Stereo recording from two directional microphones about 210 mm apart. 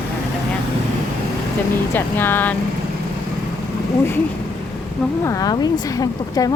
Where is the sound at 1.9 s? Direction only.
10° left (ahead or behind).